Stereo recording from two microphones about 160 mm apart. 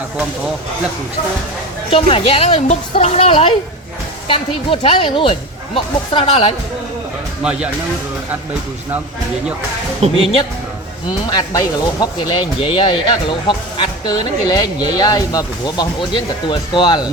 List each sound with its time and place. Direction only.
1.9 s speech: 35° left (ahead or behind)
10.0 s speech: 40° right (ahead or behind)
11.3 s speech: 25° left (ahead or behind)